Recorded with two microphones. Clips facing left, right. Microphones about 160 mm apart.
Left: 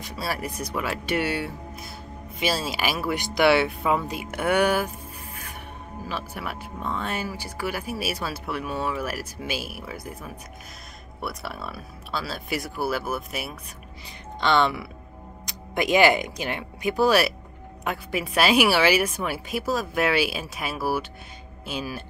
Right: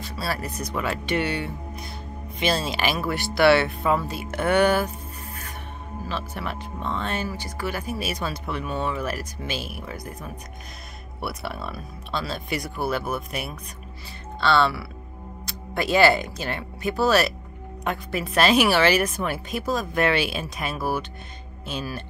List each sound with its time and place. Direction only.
0.0 s speech: 15° left (ahead or behind)
14.4 s speech: 15° left (ahead or behind)